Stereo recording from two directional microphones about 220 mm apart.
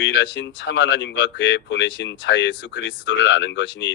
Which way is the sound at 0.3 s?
55° left (ahead or behind).